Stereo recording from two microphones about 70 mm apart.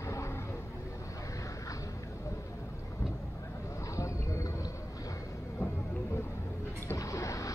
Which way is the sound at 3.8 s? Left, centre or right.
Left.